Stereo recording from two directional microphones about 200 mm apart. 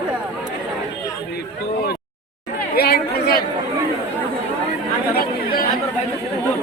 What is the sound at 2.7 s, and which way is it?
Chatter, 50° left (ahead or behind).